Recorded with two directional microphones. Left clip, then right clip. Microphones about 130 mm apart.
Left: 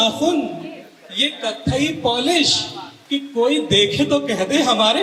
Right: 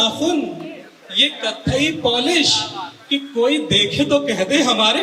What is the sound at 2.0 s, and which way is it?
Speech, 15° left (ahead or behind).